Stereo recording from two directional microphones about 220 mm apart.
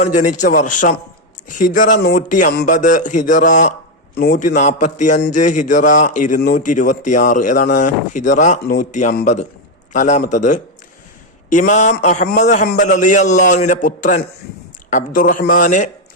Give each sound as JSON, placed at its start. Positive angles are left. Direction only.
{"t": 0.0, "sound": "speech", "side_deg": 35}